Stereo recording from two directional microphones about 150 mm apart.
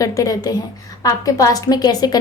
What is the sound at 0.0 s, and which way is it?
A woman's voice, 25° left (ahead or behind).